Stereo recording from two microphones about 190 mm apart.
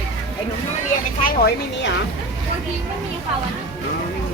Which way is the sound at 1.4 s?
70° left (ahead or behind).